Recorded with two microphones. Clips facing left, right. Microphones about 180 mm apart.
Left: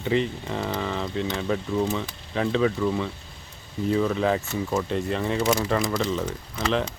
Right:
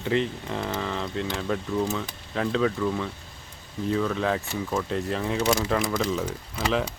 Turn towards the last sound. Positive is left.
turn(degrees=-5)  # may be behind; listen again after turning